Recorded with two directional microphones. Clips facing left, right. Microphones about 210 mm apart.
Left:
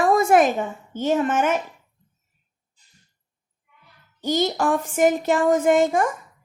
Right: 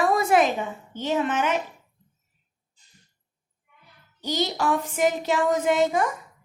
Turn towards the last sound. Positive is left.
turn(degrees=50)  # may be behind; listen again after turning